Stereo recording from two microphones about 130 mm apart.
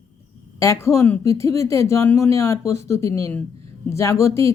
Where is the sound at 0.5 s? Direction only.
25° left (ahead or behind).